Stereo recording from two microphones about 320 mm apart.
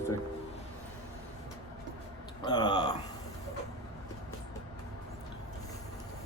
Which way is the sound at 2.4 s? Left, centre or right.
Centre.